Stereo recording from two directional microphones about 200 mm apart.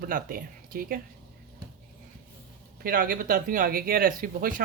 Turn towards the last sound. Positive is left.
turn(degrees=-45)  # may be behind; listen again after turning